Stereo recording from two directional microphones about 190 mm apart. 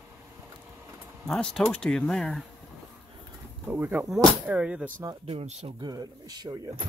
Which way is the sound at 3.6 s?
10° right (ahead or behind).